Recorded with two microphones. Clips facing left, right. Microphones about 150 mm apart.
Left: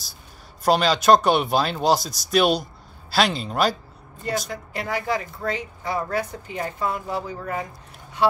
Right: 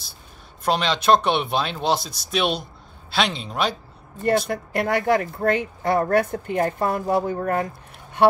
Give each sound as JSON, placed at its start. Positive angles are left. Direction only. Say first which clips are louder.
{"t": 0.7, "sound": "speech", "louder": "left 2 dB", "side_deg": 5}
{"t": 4.5, "sound": "a woman's voice", "louder": "right 6 dB", "side_deg": -60}